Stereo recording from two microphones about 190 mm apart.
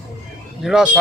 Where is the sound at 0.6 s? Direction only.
5° right (ahead or behind).